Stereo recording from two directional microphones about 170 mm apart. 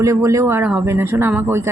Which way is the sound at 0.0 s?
20° right (ahead or behind).